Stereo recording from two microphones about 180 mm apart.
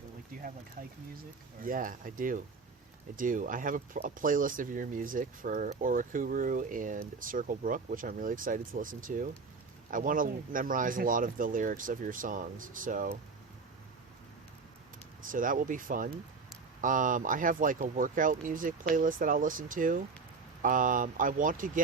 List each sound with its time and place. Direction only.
0.8 s speech: 50° right (ahead or behind)
15.3 s speech: 50° right (ahead or behind)